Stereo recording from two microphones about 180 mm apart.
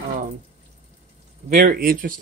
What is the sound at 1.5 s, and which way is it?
Speech, 50° right (ahead or behind).